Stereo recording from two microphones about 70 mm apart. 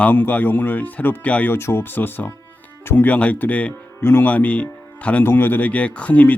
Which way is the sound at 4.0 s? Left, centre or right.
Left.